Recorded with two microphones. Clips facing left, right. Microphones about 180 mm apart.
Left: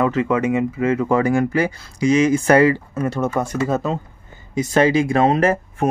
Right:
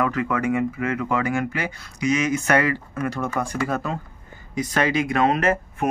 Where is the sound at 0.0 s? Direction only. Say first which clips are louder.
Left 5 dB; 25° left (ahead or behind).